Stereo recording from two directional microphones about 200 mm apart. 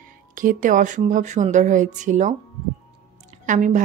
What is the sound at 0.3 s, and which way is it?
Speech, 45° right (ahead or behind).